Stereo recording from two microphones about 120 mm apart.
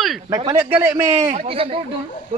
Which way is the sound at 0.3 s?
30° right (ahead or behind).